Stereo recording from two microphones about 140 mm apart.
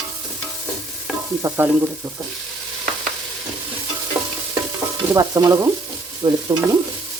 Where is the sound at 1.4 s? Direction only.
20° right (ahead or behind).